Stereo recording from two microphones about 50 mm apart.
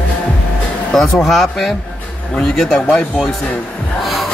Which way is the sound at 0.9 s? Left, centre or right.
Centre.